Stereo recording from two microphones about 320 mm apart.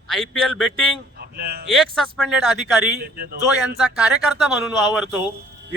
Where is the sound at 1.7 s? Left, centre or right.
Centre.